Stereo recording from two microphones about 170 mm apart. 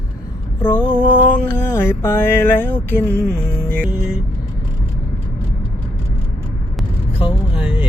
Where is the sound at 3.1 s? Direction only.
15° right (ahead or behind).